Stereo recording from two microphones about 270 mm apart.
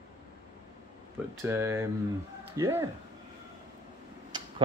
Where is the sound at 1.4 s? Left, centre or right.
Centre.